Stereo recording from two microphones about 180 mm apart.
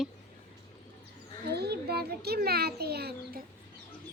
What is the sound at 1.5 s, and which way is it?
A child's voice, 65° right (ahead or behind).